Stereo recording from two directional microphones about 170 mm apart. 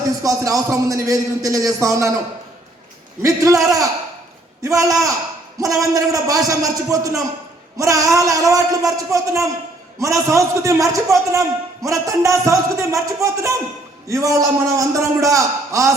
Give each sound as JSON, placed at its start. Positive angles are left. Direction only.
{"t": 0.2, "sound": "a man's voice", "side_deg": -20}
{"t": 3.2, "sound": "a man's voice", "side_deg": -20}